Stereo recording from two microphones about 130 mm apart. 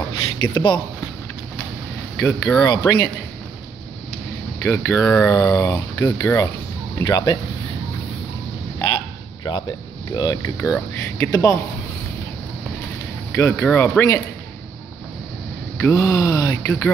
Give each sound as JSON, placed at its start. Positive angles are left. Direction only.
{"t": 0.4, "sound": "speech", "side_deg": 30}
{"t": 2.6, "sound": "speech", "side_deg": 30}
{"t": 4.6, "sound": "speech", "side_deg": 20}
{"t": 5.0, "sound": "speech", "side_deg": 10}
{"t": 5.3, "sound": "speech", "side_deg": 25}
{"t": 8.9, "sound": "a sound", "side_deg": 35}
{"t": 10.1, "sound": "speech", "side_deg": 30}
{"t": 13.4, "sound": "speech", "side_deg": 15}
{"t": 15.8, "sound": "speech", "side_deg": 25}